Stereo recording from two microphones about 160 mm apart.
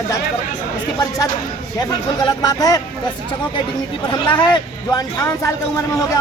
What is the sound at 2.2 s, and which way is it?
Speech, 25° left (ahead or behind).